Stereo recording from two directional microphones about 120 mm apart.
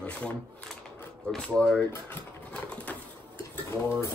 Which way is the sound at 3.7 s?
25° left (ahead or behind).